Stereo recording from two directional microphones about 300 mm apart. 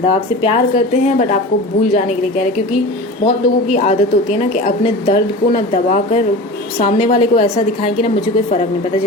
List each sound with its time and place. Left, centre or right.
0.1 s a woman's voice: centre
1.9 s a woman's voice: left